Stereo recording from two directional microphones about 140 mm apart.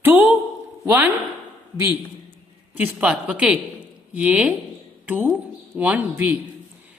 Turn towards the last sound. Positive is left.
turn(degrees=-10)  # may be behind; listen again after turning